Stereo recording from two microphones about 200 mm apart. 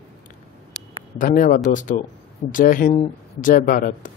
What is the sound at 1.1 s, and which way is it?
Speech, 40° left (ahead or behind).